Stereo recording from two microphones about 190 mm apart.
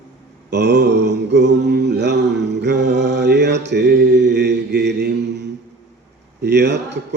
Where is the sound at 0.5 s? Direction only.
60° right (ahead or behind).